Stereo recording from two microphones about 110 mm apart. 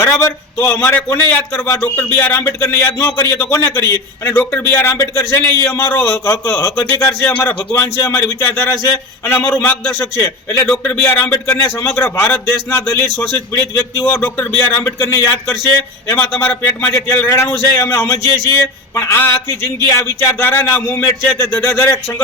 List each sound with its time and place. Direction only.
0.0 s a man's voice: 25° left (ahead or behind)